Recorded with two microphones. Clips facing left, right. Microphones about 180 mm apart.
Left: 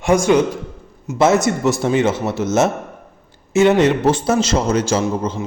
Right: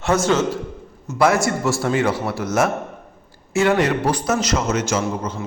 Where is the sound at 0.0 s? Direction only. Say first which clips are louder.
Left 4 dB; 15° left (ahead or behind).